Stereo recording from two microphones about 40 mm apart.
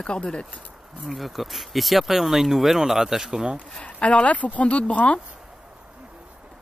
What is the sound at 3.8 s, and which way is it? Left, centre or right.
Speech, left.